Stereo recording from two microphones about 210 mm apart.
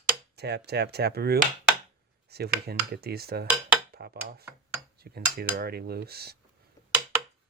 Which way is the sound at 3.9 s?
45° right (ahead or behind).